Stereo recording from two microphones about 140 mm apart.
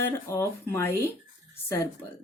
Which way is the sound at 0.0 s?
20° left (ahead or behind).